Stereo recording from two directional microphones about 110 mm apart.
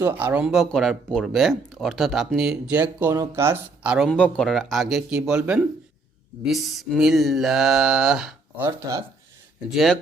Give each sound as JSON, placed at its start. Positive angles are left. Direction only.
{"t": 0.0, "sound": "speech", "side_deg": -20}
{"t": 0.4, "sound": "speech", "side_deg": 0}
{"t": 3.0, "sound": "speech", "side_deg": -25}
{"t": 3.8, "sound": "speech", "side_deg": -10}
{"t": 4.1, "sound": "speech", "side_deg": 5}
{"t": 9.7, "sound": "speech", "side_deg": 0}